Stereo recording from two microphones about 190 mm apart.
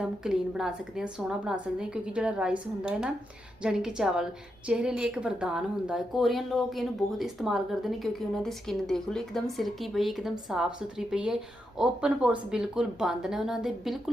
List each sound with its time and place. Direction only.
0.0 s a woman's voice: 5° right (ahead or behind)